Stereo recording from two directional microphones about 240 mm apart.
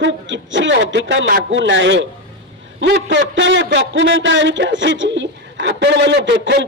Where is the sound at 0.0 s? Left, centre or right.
Right.